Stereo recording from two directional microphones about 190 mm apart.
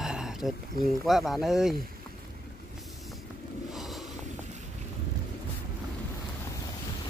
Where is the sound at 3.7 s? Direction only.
Centre (ahead or behind).